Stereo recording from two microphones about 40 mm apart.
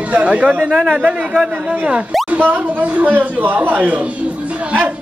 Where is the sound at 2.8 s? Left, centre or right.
Right.